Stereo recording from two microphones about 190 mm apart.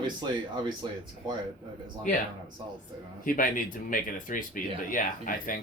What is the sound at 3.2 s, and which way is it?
Speech, 45° left (ahead or behind).